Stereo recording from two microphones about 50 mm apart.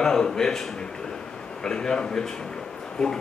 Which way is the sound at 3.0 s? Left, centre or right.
Centre.